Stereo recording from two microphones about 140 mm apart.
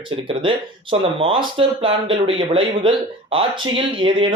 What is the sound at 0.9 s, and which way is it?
Speech, 40° right (ahead or behind).